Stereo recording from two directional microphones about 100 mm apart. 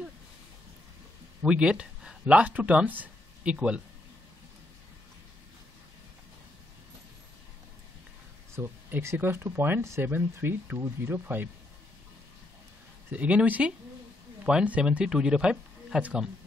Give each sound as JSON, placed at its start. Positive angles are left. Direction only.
{"t": 1.4, "sound": "speech", "side_deg": -10}
{"t": 8.5, "sound": "speech", "side_deg": -25}
{"t": 13.1, "sound": "speech", "side_deg": -15}